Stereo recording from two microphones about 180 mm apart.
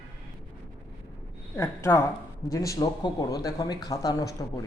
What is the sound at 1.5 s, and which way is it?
A man's voice, 15° left (ahead or behind).